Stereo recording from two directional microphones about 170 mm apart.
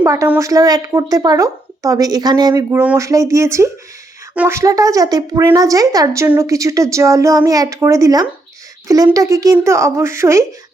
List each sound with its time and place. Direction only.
0.0 s a woman's voice: 15° right (ahead or behind)